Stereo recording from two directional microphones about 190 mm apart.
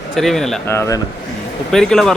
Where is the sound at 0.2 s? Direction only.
Centre (ahead or behind).